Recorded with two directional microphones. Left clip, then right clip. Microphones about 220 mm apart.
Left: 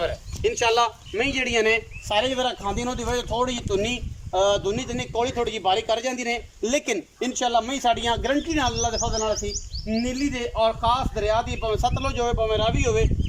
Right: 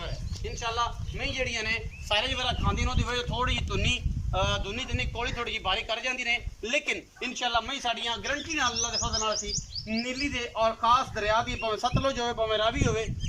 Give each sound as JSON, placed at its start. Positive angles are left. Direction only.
{"t": 0.0, "sound": "speech", "side_deg": 45}